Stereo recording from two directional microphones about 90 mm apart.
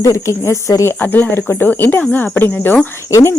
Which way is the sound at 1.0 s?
20° left (ahead or behind).